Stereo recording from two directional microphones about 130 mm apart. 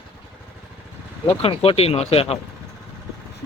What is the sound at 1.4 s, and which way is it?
Speech, 45° left (ahead or behind).